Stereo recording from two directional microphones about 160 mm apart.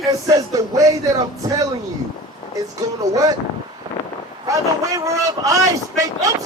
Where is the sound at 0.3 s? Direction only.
20° right (ahead or behind).